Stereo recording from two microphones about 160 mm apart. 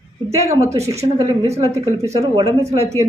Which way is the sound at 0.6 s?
20° right (ahead or behind).